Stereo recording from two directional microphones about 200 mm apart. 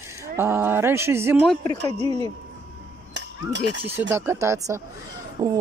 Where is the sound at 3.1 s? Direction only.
60° right (ahead or behind).